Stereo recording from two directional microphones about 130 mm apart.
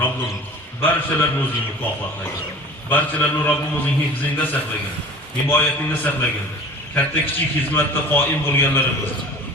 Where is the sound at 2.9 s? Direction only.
10° left (ahead or behind).